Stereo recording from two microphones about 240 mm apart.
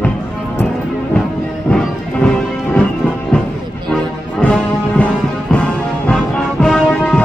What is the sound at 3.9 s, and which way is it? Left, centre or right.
Music, centre.